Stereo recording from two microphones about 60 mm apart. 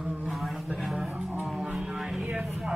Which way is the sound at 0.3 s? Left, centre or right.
Centre.